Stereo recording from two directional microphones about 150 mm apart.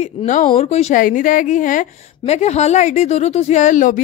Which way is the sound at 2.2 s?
45° left (ahead or behind).